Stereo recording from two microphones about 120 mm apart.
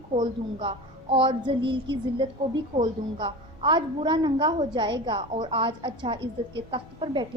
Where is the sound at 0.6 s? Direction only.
50° right (ahead or behind).